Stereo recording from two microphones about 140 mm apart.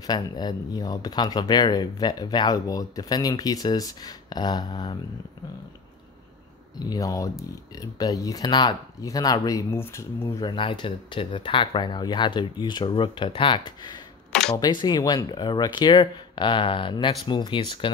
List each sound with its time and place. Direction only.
0.0 s speech: 30° left (ahead or behind)
6.9 s speech: 25° left (ahead or behind)
10.4 s speech: 35° left (ahead or behind)